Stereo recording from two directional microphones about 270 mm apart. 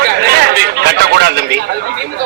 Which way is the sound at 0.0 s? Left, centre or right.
Right.